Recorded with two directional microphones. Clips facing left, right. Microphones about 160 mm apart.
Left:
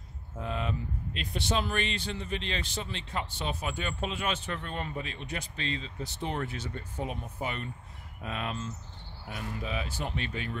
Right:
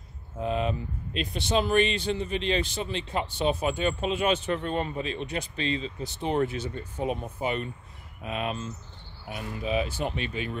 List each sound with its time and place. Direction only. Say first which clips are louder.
0.5 s speech: right 6 dB; 20° right (ahead or behind)